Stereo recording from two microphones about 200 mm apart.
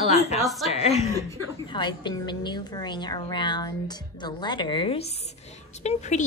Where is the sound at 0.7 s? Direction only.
30° left (ahead or behind).